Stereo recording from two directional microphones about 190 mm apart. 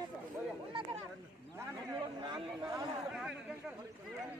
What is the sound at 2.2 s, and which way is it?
Speech, 20° right (ahead or behind).